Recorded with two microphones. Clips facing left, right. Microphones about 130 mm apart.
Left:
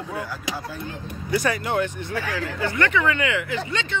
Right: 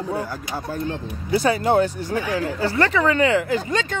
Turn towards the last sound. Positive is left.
turn(degrees=-40)  # may be behind; listen again after turning